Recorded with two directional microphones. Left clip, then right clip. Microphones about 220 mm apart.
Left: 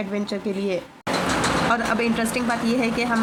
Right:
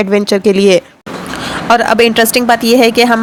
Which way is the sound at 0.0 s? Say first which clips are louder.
Right 17 dB; 50° right (ahead or behind).